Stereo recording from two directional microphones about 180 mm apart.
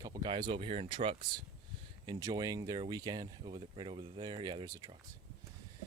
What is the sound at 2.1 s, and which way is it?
Speech, 20° right (ahead or behind).